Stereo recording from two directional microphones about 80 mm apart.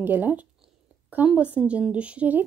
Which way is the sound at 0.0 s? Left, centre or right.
Right.